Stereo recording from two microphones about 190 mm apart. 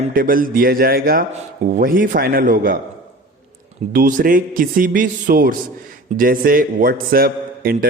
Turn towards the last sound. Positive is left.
turn(degrees=-50)  # may be behind; listen again after turning